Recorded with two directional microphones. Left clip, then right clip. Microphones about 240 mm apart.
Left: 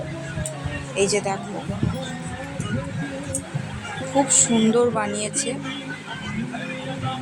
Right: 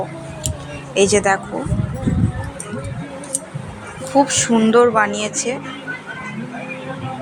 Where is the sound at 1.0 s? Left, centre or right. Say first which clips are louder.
Right 8 dB; centre.